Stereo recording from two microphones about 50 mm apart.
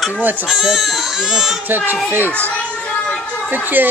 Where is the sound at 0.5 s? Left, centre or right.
Centre.